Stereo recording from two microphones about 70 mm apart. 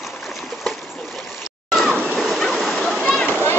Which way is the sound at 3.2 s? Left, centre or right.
Left.